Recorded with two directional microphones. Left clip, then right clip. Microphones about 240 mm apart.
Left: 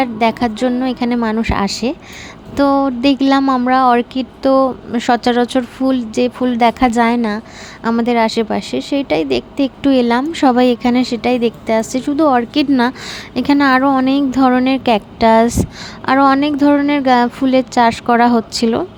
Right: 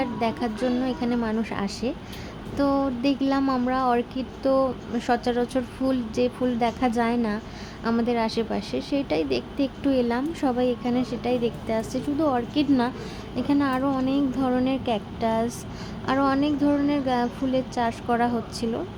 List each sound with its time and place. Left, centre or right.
0.0 s speech: left